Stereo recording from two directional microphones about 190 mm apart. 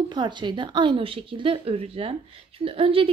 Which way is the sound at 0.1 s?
25° right (ahead or behind).